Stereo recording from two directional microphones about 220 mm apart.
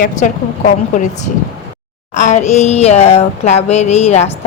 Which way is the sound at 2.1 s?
35° left (ahead or behind).